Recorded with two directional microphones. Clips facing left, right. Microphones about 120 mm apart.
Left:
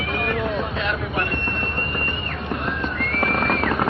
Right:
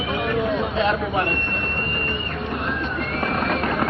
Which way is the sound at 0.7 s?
25° right (ahead or behind).